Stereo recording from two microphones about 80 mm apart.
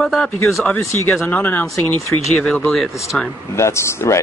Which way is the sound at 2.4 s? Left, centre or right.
Centre.